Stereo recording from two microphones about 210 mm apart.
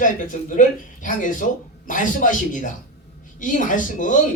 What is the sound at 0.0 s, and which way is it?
A woman's voice, 35° left (ahead or behind).